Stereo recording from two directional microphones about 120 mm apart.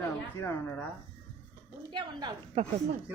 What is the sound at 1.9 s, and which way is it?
Speech, 40° right (ahead or behind).